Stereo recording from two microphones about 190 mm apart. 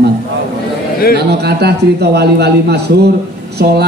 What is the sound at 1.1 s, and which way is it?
A man's voice, 60° right (ahead or behind).